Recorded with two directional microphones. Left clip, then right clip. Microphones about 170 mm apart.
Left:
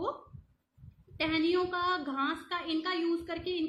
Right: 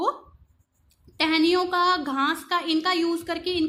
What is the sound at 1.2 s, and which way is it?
A woman's voice, 60° right (ahead or behind).